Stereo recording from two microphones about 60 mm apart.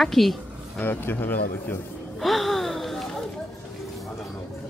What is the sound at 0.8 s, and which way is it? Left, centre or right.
Speech, left.